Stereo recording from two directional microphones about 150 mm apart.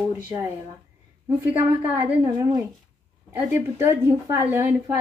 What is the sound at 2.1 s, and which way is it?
Speech, 20° right (ahead or behind).